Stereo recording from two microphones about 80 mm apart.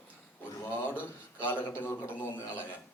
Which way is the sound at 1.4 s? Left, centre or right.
Left.